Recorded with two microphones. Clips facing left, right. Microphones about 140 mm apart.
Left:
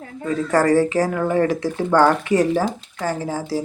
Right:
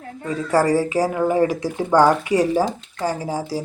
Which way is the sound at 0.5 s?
10° right (ahead or behind).